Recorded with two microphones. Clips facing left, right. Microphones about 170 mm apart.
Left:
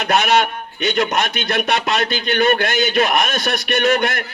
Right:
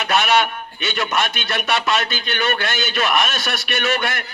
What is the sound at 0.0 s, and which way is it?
A man's voice, 50° left (ahead or behind).